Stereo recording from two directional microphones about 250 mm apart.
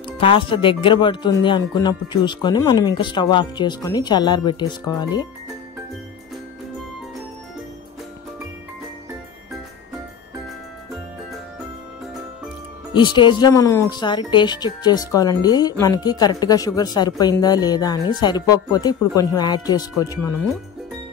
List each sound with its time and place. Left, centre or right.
0.2 s speech: left
12.9 s speech: centre